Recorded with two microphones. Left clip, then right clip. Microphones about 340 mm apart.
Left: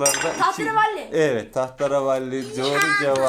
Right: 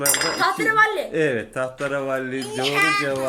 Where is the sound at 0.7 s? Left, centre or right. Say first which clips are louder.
Right 2 dB; centre.